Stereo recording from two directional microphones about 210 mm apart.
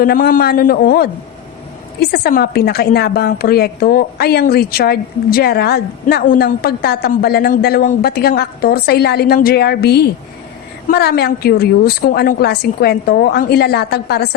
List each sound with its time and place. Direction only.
0.0 s a woman's voice: 45° left (ahead or behind)